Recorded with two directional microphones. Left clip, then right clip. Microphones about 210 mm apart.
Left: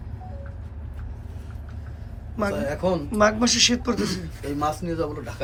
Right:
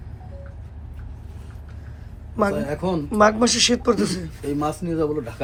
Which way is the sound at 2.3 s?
Centre (ahead or behind).